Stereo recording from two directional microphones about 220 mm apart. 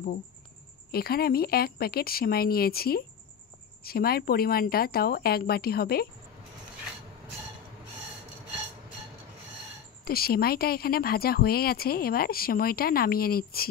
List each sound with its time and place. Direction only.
0.9 s speech: 45° left (ahead or behind)
10.0 s speech: 45° left (ahead or behind)